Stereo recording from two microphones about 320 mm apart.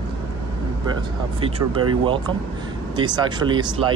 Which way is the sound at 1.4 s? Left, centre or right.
Centre.